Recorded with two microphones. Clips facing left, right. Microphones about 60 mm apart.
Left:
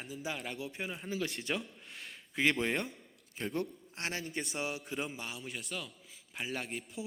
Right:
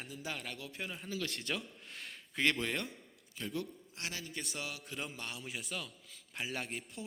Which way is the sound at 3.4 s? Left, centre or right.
Left.